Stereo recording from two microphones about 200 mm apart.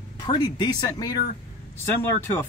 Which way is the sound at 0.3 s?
20° left (ahead or behind).